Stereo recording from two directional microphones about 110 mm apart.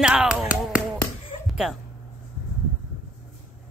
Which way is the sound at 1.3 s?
65° left (ahead or behind).